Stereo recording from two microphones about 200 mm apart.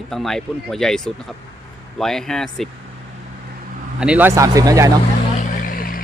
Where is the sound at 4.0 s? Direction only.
5° right (ahead or behind).